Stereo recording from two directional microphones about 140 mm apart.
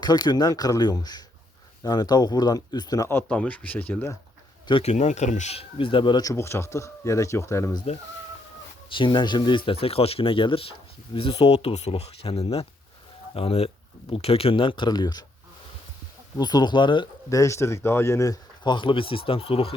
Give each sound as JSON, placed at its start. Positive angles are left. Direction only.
{"t": 0.0, "sound": "speech", "side_deg": 30}
{"t": 4.7, "sound": "speech", "side_deg": 50}
{"t": 6.3, "sound": "speech", "side_deg": 20}
{"t": 8.9, "sound": "speech", "side_deg": 35}
{"t": 16.4, "sound": "speech", "side_deg": 30}
{"t": 17.2, "sound": "speech", "side_deg": 20}